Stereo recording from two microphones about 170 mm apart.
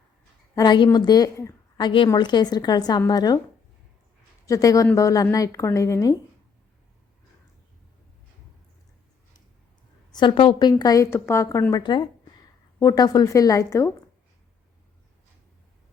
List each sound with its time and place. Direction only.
0.5 s a woman's voice: 25° left (ahead or behind)
4.4 s speech: 20° left (ahead or behind)
10.1 s speech: 25° left (ahead or behind)